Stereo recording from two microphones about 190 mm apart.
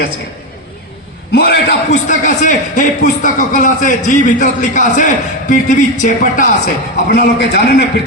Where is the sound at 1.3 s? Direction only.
55° left (ahead or behind).